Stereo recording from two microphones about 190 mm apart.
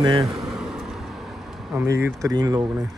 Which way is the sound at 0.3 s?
Centre (ahead or behind).